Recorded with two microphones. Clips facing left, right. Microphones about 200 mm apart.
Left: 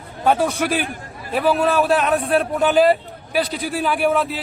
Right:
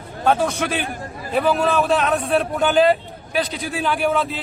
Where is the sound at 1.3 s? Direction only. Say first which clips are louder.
Left 1 dB; centre (ahead or behind).